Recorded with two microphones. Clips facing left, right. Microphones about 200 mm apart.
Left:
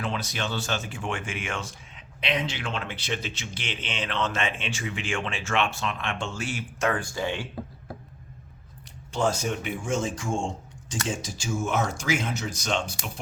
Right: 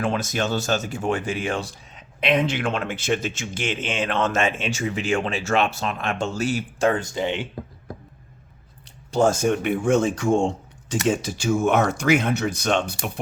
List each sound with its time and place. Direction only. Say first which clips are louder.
0.0 s speech: right 7 dB; 45° right (ahead or behind)
2.2 s speech: right 8 dB; 55° right (ahead or behind); by 7.4 s 20° right (ahead or behind)
9.1 s speech: right 7 dB; 45° right (ahead or behind)